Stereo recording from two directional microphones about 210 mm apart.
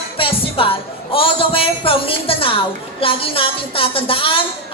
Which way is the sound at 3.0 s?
25° left (ahead or behind).